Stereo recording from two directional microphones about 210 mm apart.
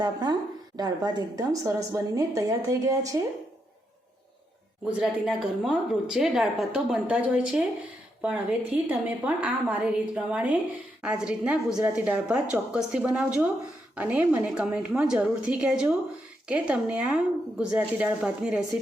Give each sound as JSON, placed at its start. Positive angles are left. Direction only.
{"t": 0.0, "sound": "speech", "side_deg": -20}
{"t": 4.9, "sound": "a woman's voice", "side_deg": -5}